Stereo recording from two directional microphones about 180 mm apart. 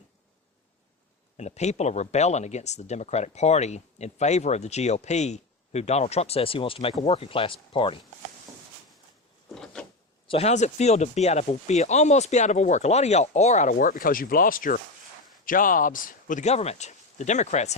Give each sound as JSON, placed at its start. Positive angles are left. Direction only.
{"t": 1.4, "sound": "speech", "side_deg": 40}
{"t": 10.2, "sound": "speech", "side_deg": 35}
{"t": 13.7, "sound": "speech", "side_deg": 50}